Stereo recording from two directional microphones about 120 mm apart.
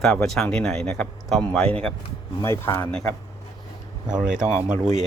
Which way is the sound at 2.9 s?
5° left (ahead or behind).